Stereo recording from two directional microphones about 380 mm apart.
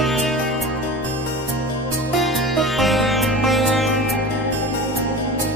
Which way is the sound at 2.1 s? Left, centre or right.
Centre.